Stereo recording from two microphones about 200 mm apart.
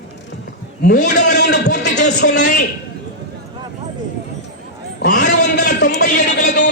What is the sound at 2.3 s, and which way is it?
Speech, 40° left (ahead or behind).